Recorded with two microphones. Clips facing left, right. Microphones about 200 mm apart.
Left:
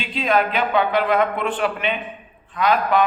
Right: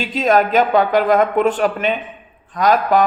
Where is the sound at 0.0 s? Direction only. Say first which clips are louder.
Right 5 dB; 45° right (ahead or behind).